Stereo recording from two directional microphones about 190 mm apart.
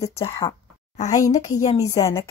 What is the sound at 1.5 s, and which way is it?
Speech, 20° left (ahead or behind).